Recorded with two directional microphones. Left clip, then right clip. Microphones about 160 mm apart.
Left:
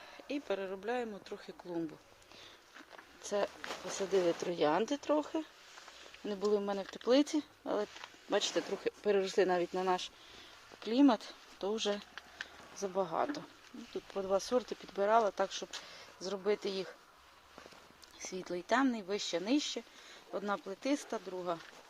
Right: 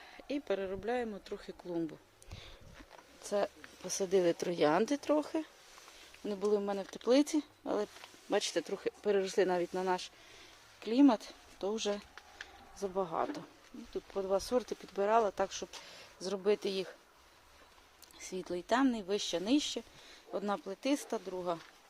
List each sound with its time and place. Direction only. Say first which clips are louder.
0.3 s speech: right 2 dB; 20° right (ahead or behind)
3.2 s speech: right 1 dB; 10° right (ahead or behind)
3.9 s speech: right 2 dB; 25° right (ahead or behind)
6.2 s speech: right 1 dB; 10° right (ahead or behind)
18.3 s speech: right 1 dB; 5° right (ahead or behind)